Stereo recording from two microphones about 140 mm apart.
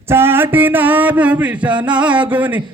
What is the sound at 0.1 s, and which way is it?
Speech, 15° right (ahead or behind).